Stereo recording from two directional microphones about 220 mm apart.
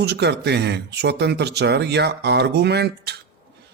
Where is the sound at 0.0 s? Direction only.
50° right (ahead or behind).